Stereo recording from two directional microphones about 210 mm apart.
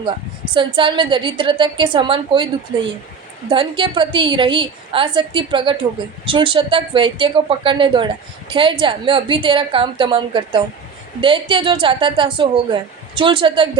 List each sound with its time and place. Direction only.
0.5 s speech: 25° right (ahead or behind)
3.5 s speech: 25° right (ahead or behind)